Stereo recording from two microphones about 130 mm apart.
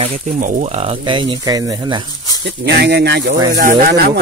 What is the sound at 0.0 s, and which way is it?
Speech, 55° right (ahead or behind).